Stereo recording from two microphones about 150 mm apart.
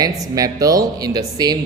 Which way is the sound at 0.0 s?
25° right (ahead or behind).